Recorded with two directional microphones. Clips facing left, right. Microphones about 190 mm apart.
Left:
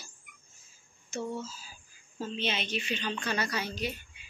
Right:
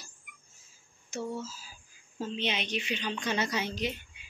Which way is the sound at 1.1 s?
5° right (ahead or behind).